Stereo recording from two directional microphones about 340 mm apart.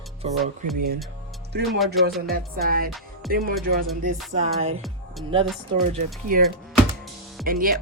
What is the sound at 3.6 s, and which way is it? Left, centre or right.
Music, right.